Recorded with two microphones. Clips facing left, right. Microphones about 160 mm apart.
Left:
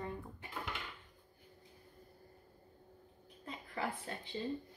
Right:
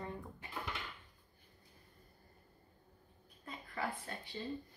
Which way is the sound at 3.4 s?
20° left (ahead or behind).